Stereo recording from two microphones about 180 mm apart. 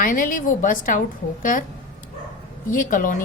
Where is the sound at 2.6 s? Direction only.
50° left (ahead or behind).